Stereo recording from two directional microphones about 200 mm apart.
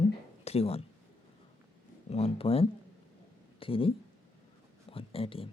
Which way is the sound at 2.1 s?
30° left (ahead or behind).